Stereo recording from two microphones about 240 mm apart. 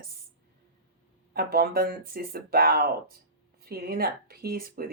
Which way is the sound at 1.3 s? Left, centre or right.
Right.